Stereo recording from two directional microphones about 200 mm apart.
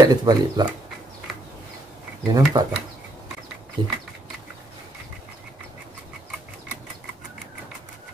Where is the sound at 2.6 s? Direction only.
20° right (ahead or behind).